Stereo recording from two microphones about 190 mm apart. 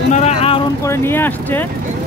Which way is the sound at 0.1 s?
35° left (ahead or behind).